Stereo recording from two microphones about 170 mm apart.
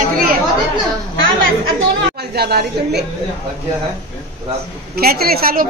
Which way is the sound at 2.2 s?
70° right (ahead or behind).